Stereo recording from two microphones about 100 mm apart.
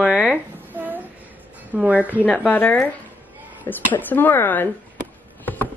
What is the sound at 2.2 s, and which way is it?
Speech, 15° left (ahead or behind).